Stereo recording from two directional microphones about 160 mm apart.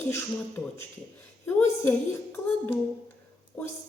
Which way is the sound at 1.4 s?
10° left (ahead or behind).